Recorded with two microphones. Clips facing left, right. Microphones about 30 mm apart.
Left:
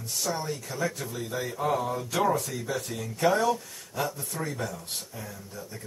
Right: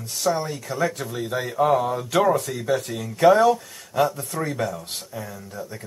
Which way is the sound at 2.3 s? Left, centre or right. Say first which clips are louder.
Right 7 dB; right.